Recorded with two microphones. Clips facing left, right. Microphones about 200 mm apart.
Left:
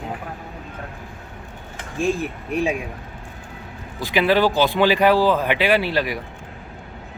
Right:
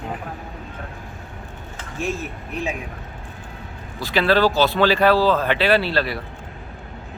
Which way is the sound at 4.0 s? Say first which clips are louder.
Even; 15° left (ahead or behind).